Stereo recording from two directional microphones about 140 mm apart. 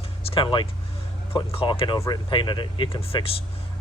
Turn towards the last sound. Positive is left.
turn(degrees=45)  # may be behind; listen again after turning